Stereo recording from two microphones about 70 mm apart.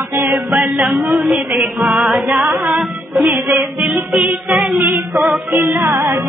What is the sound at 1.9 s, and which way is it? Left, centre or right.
Music, centre.